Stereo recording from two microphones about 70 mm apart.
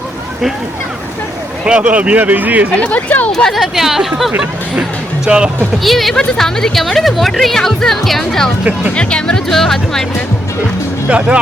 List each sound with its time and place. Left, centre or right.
1.6 s speech: centre
2.7 s speech: centre
3.3 s speech: centre
5.8 s speech: centre
9.0 s speech: centre
11.1 s speech: centre